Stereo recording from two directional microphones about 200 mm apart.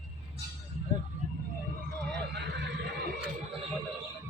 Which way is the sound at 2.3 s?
55° right (ahead or behind).